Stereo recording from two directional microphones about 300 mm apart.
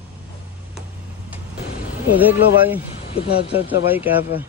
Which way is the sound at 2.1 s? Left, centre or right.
Centre.